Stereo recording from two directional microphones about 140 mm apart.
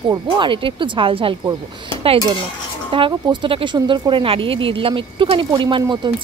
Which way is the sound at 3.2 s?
35° right (ahead or behind).